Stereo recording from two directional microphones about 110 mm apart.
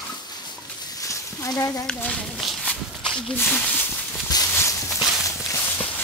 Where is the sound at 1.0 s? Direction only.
30° left (ahead or behind).